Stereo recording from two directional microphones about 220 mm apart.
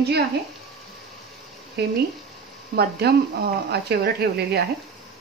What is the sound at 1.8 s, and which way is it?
Speech, 45° right (ahead or behind).